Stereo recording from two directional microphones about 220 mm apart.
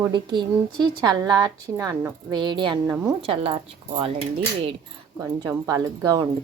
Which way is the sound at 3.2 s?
25° right (ahead or behind).